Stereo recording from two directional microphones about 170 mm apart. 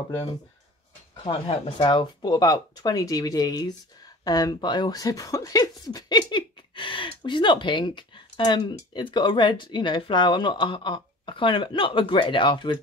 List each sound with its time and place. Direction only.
1.2 s speech: 30° left (ahead or behind)